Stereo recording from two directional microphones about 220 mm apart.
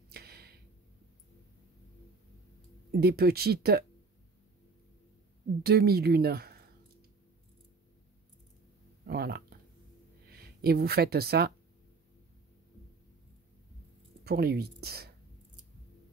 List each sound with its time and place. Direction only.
0.1 s a sound: 45° right (ahead or behind)
2.9 s speech: 45° right (ahead or behind)
5.6 s speech: 45° right (ahead or behind)
9.0 s speech: 45° right (ahead or behind)
14.2 s speech: 45° right (ahead or behind)